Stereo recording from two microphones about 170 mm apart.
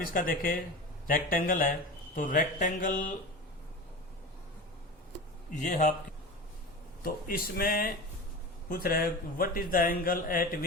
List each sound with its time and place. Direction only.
0.0 s speech: 55° left (ahead or behind)
5.5 s speech: 45° left (ahead or behind)
7.0 s speech: 60° left (ahead or behind)